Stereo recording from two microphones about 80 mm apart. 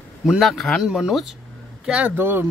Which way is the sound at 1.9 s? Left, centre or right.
Centre.